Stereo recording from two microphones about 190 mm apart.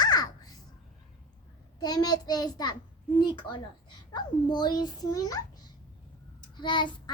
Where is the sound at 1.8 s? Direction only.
20° left (ahead or behind).